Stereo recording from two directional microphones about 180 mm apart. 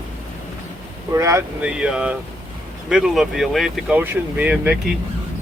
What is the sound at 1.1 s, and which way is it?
Speech, 15° right (ahead or behind).